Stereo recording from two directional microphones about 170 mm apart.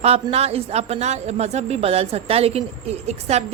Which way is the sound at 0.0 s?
35° right (ahead or behind).